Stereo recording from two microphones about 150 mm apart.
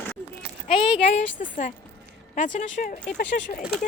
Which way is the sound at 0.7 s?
35° left (ahead or behind).